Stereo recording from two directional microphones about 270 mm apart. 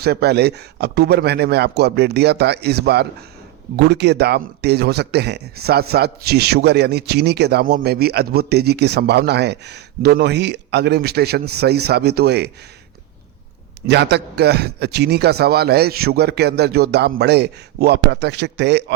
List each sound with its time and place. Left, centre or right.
0.0 s speech: right
13.8 s speech: right